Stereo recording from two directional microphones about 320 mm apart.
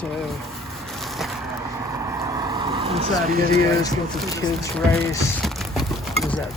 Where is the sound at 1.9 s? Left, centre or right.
Centre; by 3.6 s right.